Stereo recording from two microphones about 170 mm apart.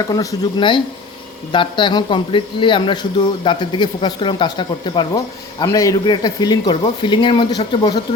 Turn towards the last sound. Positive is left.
turn(degrees=25)  # may be behind; listen again after turning